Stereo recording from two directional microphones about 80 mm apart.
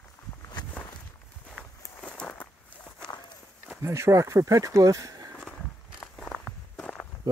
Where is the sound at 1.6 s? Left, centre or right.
Centre.